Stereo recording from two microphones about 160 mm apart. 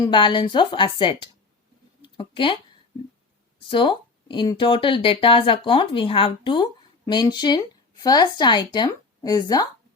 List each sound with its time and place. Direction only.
0.0 s speech: 30° left (ahead or behind)
2.0 s a sound: 30° left (ahead or behind)
3.7 s speech: 30° left (ahead or behind)